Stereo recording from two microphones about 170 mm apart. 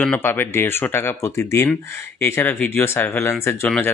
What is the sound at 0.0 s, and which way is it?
Speech, 10° left (ahead or behind).